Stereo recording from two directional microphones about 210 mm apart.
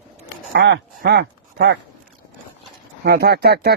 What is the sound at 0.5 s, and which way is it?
Speech, 55° right (ahead or behind).